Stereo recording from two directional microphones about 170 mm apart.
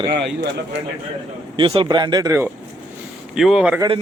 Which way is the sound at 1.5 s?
30° right (ahead or behind).